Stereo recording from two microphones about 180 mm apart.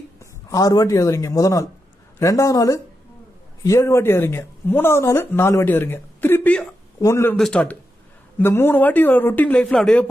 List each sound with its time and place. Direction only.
0.2 s speech: 20° left (ahead or behind)
7.3 s speech: 5° left (ahead or behind)